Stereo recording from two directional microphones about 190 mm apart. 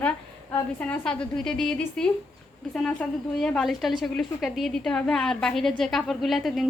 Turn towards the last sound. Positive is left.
turn(degrees=0)  # may be behind; listen again after turning